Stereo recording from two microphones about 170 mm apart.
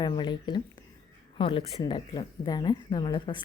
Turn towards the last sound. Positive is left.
turn(degrees=25)  # may be behind; listen again after turning